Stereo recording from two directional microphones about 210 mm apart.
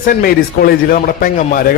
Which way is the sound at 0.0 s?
40° left (ahead or behind).